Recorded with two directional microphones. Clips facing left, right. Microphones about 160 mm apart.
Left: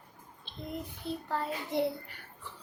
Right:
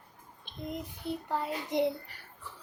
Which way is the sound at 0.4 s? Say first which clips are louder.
Right 2 dB; 15° right (ahead or behind).